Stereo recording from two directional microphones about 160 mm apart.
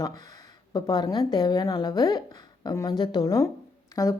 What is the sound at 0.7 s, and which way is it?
Speech, 25° left (ahead or behind).